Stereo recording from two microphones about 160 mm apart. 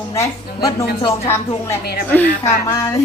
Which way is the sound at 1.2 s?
15° left (ahead or behind).